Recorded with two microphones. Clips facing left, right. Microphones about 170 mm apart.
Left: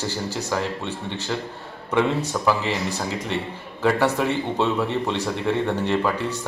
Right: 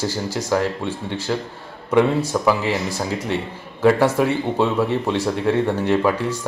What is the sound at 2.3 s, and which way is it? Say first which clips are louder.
Speech: right 3 dB; 10° right (ahead or behind).